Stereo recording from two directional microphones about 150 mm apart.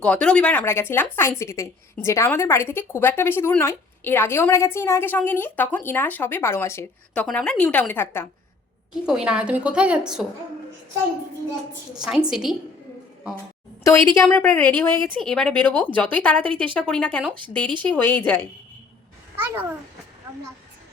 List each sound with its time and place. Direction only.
0.0 s a woman's voice: 5° left (ahead or behind)
8.9 s a woman's voice: 5° right (ahead or behind)
12.3 s a woman's voice: 5° right (ahead or behind)
13.8 s a woman's voice: 15° left (ahead or behind)
17.3 s speech: 35° right (ahead or behind)
17.8 s a woman's voice: 10° left (ahead or behind)
19.4 s a woman's voice: 15° right (ahead or behind)